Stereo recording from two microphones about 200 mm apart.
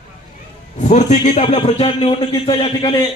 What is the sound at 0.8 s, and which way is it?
A man's voice, 35° left (ahead or behind).